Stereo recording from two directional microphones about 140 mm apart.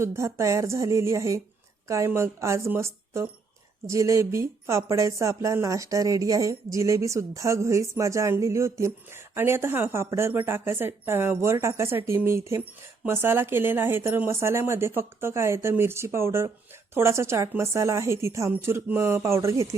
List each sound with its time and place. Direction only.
0.0 s speech: 20° right (ahead or behind)